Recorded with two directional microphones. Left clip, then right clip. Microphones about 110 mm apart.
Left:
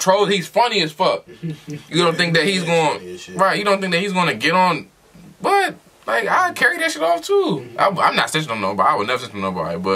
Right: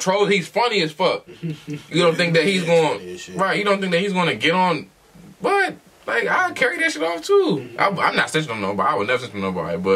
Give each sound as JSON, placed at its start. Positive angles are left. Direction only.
{"t": 0.0, "sound": "speech", "side_deg": 15}